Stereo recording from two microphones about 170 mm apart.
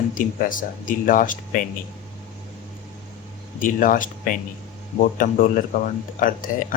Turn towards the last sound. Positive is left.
turn(degrees=55)  # may be behind; listen again after turning